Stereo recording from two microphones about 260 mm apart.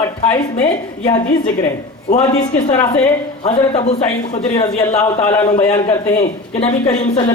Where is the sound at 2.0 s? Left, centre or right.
Left.